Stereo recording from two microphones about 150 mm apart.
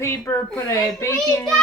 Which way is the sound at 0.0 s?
15° left (ahead or behind).